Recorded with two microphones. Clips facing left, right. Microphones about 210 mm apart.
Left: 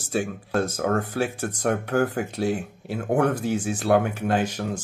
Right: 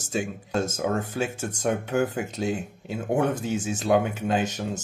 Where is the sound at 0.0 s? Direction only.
20° right (ahead or behind).